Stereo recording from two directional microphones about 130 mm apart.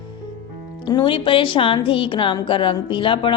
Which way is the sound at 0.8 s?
35° left (ahead or behind).